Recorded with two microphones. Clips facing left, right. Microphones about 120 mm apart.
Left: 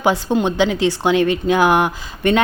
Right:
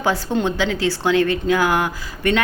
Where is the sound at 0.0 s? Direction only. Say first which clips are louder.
Left 3 dB; 15° left (ahead or behind).